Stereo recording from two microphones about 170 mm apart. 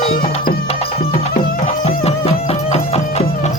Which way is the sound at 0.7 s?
35° left (ahead or behind).